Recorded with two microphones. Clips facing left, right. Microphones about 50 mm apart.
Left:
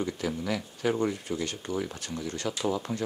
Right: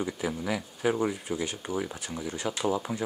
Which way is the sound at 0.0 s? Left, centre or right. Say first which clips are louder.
Even; centre.